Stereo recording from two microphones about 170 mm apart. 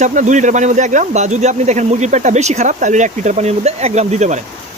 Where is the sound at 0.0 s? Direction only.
45° right (ahead or behind).